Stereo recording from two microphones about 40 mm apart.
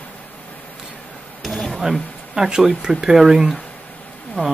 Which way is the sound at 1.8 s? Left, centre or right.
Centre.